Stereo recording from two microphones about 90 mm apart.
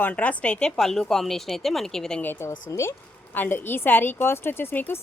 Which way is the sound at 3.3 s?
20° left (ahead or behind).